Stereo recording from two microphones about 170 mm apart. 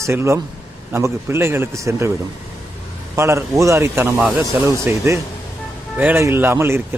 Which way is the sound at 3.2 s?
15° right (ahead or behind).